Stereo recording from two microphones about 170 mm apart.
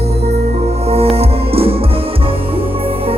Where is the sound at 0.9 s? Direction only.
35° right (ahead or behind).